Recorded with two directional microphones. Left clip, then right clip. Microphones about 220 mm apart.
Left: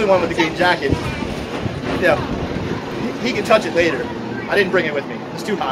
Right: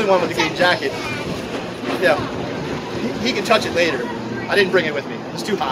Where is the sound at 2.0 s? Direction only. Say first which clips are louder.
Left 1 dB; centre (ahead or behind).